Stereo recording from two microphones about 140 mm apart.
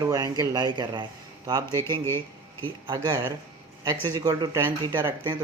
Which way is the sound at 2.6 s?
30° right (ahead or behind).